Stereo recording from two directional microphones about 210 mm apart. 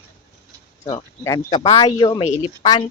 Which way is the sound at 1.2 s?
15° left (ahead or behind).